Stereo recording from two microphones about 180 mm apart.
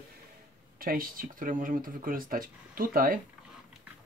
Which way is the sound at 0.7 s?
55° right (ahead or behind).